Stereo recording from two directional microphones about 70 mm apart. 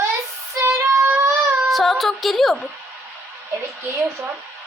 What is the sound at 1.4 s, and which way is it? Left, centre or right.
Speech, centre.